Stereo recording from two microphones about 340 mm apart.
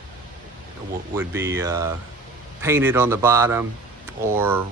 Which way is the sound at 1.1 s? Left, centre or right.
Centre.